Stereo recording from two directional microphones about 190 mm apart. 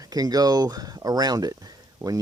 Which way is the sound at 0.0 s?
20° right (ahead or behind).